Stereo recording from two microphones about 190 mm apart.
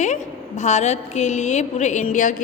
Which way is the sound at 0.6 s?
35° left (ahead or behind).